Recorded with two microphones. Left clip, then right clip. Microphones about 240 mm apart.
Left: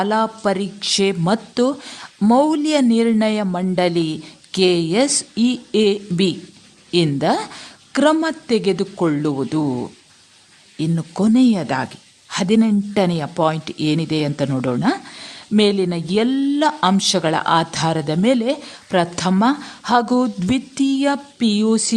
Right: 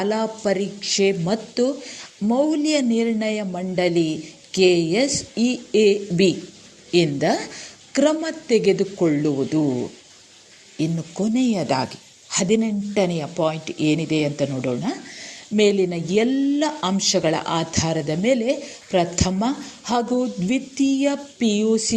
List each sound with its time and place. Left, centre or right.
0.0 s a man's voice: centre